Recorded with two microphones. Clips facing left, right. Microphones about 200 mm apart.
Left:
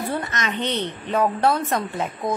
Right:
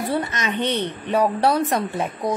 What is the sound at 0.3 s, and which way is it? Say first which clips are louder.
A woman's voice: right 2 dB; 10° right (ahead or behind).